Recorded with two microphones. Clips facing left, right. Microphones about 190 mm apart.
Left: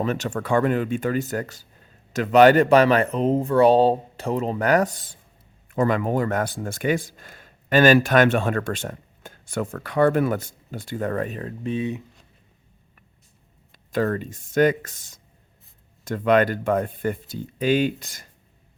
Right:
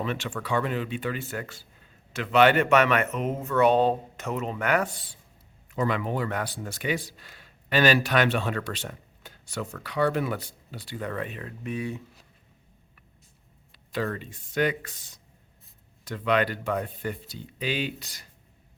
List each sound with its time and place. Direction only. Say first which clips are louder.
0.0 s speech: left 6 dB; 40° left (ahead or behind); by 12.0 s 20° left (ahead or behind)
13.9 s speech: left 7 dB; 45° left (ahead or behind)